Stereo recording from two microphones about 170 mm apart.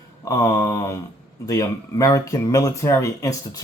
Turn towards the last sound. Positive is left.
turn(degrees=20)  # may be behind; listen again after turning